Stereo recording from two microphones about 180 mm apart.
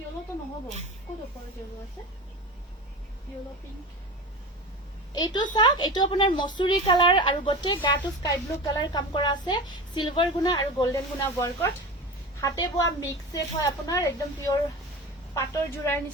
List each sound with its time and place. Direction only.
5.1 s a woman's voice: 25° left (ahead or behind)